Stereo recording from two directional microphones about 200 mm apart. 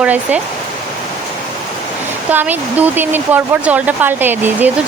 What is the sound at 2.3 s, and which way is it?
Speech, 10° right (ahead or behind).